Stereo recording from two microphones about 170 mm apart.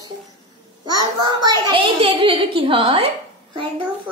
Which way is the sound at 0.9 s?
25° right (ahead or behind).